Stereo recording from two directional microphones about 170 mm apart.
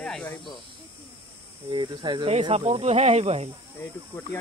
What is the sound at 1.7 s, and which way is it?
Speech, 25° right (ahead or behind).